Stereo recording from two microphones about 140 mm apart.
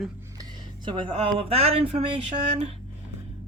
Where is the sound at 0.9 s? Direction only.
35° right (ahead or behind).